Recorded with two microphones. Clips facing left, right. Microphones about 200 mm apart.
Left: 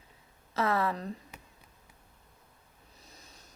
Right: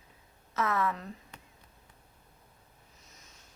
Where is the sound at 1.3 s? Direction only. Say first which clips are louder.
Left 1 dB; 10° left (ahead or behind).